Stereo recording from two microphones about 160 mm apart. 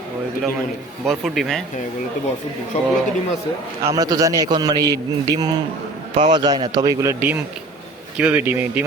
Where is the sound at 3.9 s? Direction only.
20° right (ahead or behind).